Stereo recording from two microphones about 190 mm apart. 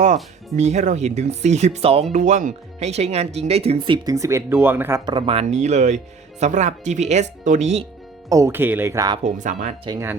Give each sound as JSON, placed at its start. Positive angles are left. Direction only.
{"t": 0.5, "sound": "speech", "side_deg": -35}
{"t": 8.3, "sound": "speech", "side_deg": -15}
{"t": 9.2, "sound": "speech", "side_deg": -40}
{"t": 9.8, "sound": "speech", "side_deg": -20}